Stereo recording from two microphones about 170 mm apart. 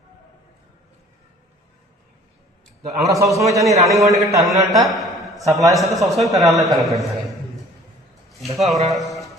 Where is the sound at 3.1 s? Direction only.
20° right (ahead or behind).